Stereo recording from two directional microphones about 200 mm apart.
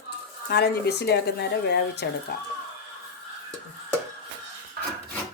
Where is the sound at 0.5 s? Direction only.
55° left (ahead or behind).